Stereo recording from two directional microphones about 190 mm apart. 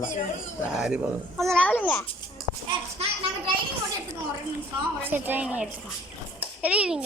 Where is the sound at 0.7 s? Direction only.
5° right (ahead or behind).